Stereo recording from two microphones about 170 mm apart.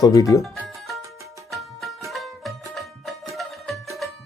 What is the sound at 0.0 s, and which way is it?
Speech, 20° left (ahead or behind).